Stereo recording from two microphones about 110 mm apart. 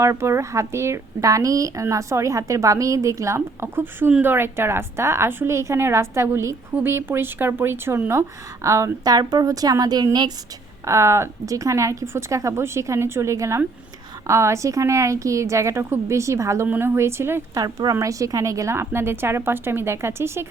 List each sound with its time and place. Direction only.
0.0 s a woman's voice: 25° right (ahead or behind)
10.8 s speech: 25° right (ahead or behind)
17.5 s a woman's voice: 35° right (ahead or behind)